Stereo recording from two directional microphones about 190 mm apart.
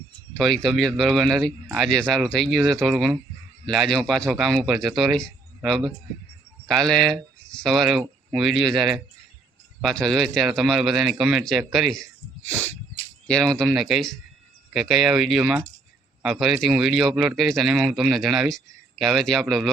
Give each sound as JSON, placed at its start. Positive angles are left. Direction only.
{"t": 0.3, "sound": "speech", "side_deg": 5}